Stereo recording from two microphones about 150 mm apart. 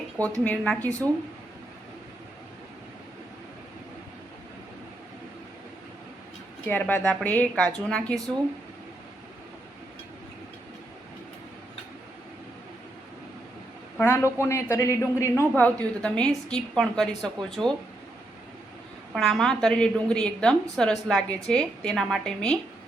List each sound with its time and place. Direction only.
0.2 s a woman's voice: 10° left (ahead or behind)
6.7 s a woman's voice: 10° left (ahead or behind)
14.0 s a woman's voice: 15° left (ahead or behind)
19.1 s a woman's voice: centre (ahead or behind)